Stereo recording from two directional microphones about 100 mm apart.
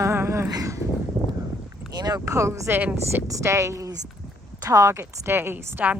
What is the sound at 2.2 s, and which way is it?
A woman's voice, 30° right (ahead or behind).